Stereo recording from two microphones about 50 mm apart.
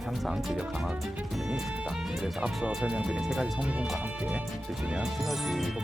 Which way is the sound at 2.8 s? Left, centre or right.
Right.